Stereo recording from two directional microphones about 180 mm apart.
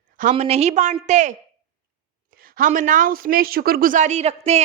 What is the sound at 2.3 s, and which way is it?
Speech, 50° right (ahead or behind).